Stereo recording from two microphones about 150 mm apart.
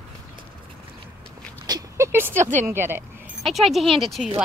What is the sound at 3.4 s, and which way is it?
Speech, centre (ahead or behind).